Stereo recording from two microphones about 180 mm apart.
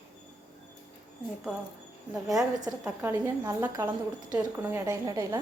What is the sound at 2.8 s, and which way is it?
A woman's voice, 10° right (ahead or behind).